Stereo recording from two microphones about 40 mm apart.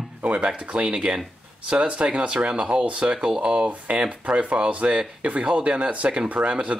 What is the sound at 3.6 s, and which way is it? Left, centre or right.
Speech, right.